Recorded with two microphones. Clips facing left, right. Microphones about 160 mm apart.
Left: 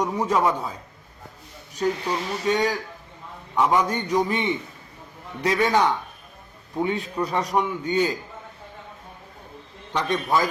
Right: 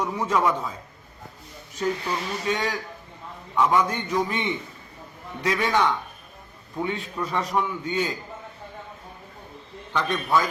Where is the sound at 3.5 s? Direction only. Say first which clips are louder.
Left 1 dB; 15° left (ahead or behind).